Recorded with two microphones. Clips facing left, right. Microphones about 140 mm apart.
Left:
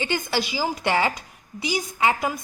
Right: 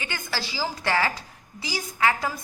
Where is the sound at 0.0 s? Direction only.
25° left (ahead or behind).